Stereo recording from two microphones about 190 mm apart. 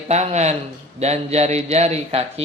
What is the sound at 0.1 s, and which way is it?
Speech, 35° right (ahead or behind).